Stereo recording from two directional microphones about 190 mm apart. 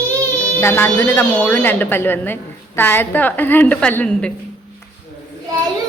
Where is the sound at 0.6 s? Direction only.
10° left (ahead or behind).